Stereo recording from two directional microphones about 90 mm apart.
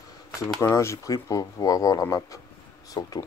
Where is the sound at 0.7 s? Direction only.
35° left (ahead or behind).